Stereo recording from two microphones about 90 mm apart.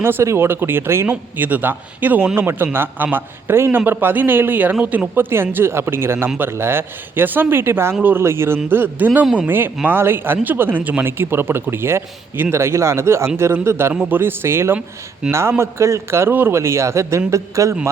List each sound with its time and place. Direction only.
0.0 s a man's voice: 30° right (ahead or behind)